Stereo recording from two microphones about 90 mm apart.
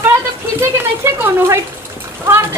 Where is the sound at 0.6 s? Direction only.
30° right (ahead or behind).